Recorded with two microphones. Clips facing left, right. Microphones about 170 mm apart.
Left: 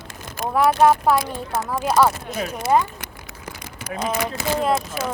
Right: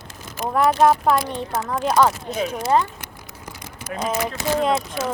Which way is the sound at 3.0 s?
60° left (ahead or behind).